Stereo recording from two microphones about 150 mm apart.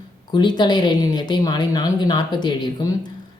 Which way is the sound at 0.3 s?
30° left (ahead or behind).